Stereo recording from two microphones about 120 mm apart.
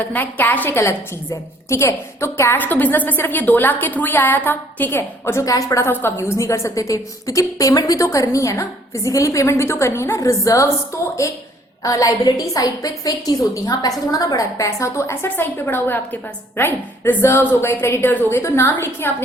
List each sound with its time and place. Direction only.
0.1 s a woman's voice: 15° left (ahead or behind)